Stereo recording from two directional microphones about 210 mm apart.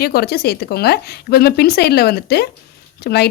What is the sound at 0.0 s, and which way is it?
Speech, 50° left (ahead or behind).